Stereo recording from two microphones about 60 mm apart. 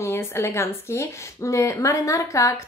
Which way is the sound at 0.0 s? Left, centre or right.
Left.